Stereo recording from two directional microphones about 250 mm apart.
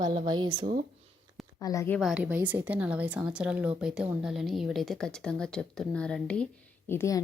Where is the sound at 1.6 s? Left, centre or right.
Centre.